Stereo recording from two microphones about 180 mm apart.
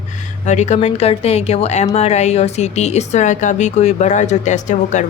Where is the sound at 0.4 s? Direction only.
40° left (ahead or behind).